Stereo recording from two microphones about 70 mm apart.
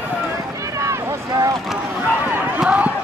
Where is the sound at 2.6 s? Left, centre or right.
Centre.